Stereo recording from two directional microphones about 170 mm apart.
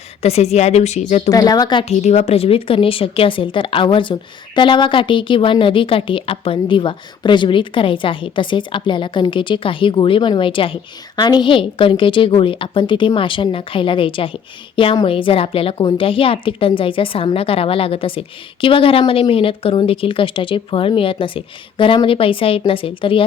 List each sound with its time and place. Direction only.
0.2 s a woman's voice: 40° left (ahead or behind)
1.3 s a woman's voice: 20° left (ahead or behind)
1.8 s a woman's voice: 40° left (ahead or behind)